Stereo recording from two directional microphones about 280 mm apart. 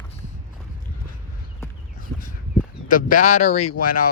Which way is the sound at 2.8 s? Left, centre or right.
Left.